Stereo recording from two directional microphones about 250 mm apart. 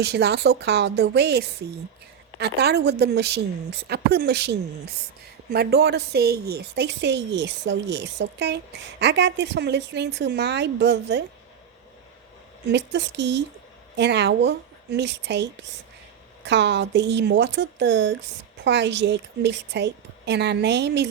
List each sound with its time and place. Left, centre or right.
0.0 s a woman's voice: right
12.6 s a woman's voice: right